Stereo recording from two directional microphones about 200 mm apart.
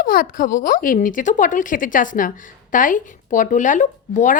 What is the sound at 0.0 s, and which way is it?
Speech, 45° left (ahead or behind).